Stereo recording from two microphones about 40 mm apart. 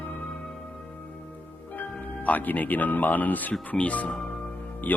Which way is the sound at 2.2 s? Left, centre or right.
Left.